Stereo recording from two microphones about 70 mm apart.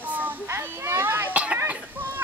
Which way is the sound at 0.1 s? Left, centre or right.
Right.